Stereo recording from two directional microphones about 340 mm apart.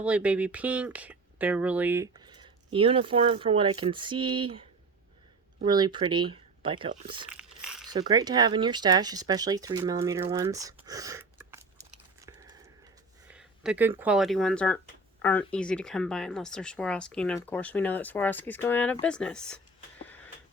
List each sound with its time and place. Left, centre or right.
0.0 s speech: centre
5.6 s speech: centre
7.3 s a sound: centre
7.9 s speech: centre